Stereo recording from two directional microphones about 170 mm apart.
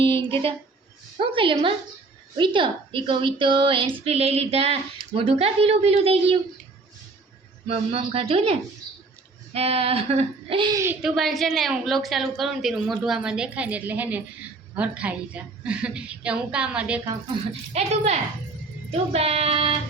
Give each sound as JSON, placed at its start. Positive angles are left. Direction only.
{"t": 0.0, "sound": "a sound", "side_deg": -30}
{"t": 1.2, "sound": "a woman's voice", "side_deg": -30}
{"t": 7.7, "sound": "a woman's voice", "side_deg": -35}
{"t": 10.7, "sound": "a woman's voice", "side_deg": -15}
{"t": 11.0, "sound": "a woman's voice", "side_deg": 0}
{"t": 17.7, "sound": "a woman's voice", "side_deg": -40}